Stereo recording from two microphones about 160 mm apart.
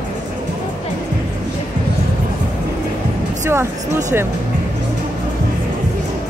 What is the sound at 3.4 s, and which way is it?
Speech, 15° right (ahead or behind).